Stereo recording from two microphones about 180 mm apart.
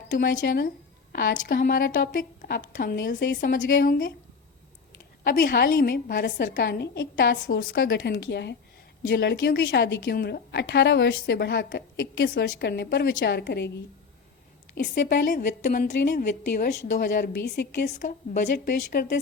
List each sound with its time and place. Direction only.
0.3 s a woman's voice: 55° left (ahead or behind)
5.2 s a woman's voice: 50° left (ahead or behind); by 7.6 s 70° left (ahead or behind)
7.7 s a woman's voice: 55° left (ahead or behind)
15.1 s a woman's voice: 45° left (ahead or behind)
17.2 s a woman's voice: 60° left (ahead or behind)
18.0 s a woman's voice: 45° left (ahead or behind)